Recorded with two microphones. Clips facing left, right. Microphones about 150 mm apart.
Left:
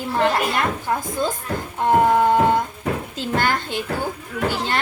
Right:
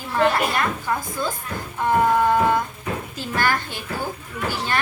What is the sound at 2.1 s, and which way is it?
Music, 20° left (ahead or behind).